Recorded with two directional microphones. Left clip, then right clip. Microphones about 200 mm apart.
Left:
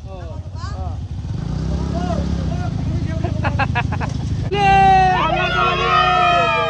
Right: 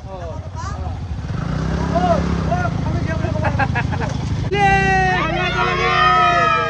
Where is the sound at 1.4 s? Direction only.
55° right (ahead or behind).